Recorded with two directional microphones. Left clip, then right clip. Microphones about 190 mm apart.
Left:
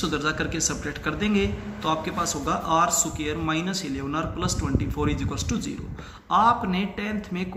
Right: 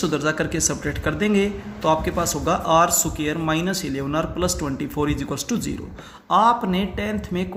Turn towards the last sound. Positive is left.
turn(degrees=-50)  # may be behind; listen again after turning